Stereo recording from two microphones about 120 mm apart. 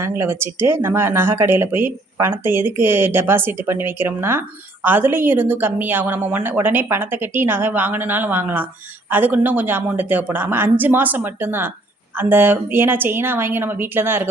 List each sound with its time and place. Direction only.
0.0 s speech: 20° right (ahead or behind)